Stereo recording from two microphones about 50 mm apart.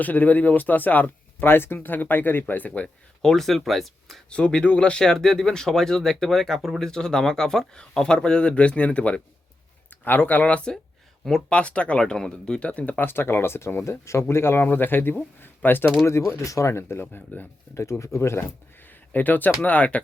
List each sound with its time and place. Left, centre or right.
0.0 s speech: left
1.5 s speech: left
3.2 s speech: centre
4.3 s speech: left
10.0 s speech: left
13.1 s speech: left
14.0 s speech: left
14.6 s speech: left
16.0 s speech: left
17.0 s speech: left
17.7 s speech: left
18.9 s a sound: left
19.6 s speech: left